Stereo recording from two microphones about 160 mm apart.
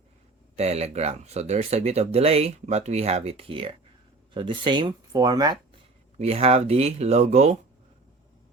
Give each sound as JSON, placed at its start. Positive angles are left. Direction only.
{"t": 0.5, "sound": "speech", "side_deg": -40}
{"t": 6.1, "sound": "speech", "side_deg": -40}